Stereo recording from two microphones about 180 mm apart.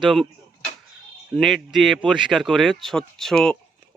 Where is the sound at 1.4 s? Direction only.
Centre (ahead or behind).